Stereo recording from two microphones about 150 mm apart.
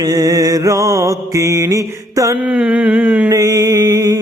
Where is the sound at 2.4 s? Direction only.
10° right (ahead or behind).